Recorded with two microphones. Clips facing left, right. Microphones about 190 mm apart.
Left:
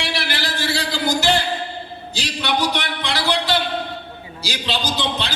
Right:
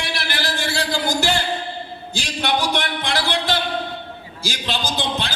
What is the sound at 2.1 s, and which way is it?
A man's voice, 50° right (ahead or behind).